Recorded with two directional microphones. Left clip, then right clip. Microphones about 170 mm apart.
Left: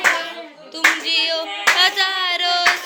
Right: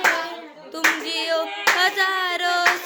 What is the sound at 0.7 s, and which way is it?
Clapping, 45° right (ahead or behind).